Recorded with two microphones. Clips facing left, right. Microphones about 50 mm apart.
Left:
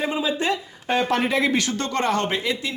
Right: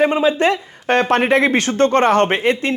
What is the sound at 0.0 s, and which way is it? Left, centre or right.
Speech, right.